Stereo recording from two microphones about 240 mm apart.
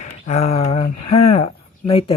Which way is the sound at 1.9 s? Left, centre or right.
Left.